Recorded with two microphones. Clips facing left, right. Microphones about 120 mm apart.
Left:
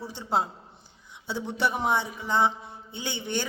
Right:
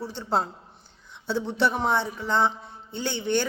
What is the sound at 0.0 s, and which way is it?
A man's voice, 15° left (ahead or behind).